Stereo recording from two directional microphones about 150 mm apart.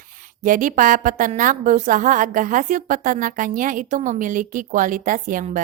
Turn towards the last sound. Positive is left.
turn(degrees=-60)  # may be behind; listen again after turning